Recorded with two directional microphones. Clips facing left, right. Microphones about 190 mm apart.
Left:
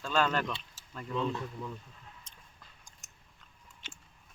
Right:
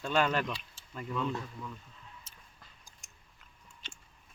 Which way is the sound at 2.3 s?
5° right (ahead or behind).